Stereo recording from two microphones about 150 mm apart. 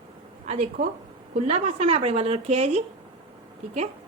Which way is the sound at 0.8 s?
90° right.